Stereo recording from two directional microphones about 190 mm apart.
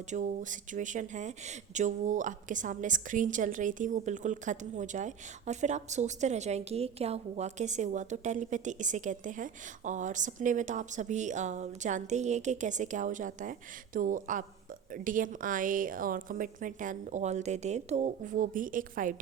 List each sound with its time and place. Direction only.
0.1 s a woman's voice: 40° right (ahead or behind)